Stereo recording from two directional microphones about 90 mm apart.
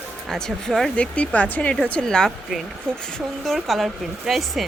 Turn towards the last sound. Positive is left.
turn(degrees=0)  # may be behind; listen again after turning